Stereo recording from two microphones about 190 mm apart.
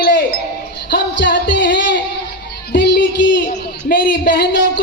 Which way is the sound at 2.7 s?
65° left (ahead or behind).